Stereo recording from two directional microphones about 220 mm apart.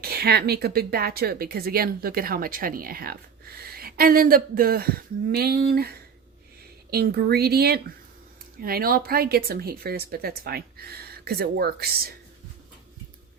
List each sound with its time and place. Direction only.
0.0 s a woman's voice: 45° right (ahead or behind)
6.9 s a woman's voice: 45° right (ahead or behind)